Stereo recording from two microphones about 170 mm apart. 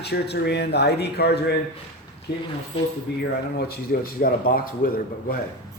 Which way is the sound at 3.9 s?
55° left (ahead or behind).